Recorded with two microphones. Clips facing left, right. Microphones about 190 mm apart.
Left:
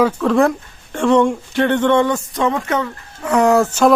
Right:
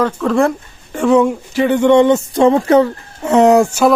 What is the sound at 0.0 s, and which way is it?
Speech, centre (ahead or behind).